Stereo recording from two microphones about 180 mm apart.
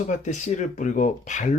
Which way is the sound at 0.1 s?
40° left (ahead or behind).